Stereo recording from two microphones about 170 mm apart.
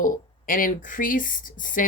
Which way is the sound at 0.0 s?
55° left (ahead or behind).